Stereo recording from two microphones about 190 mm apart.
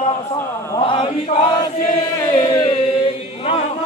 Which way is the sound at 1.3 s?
55° left (ahead or behind).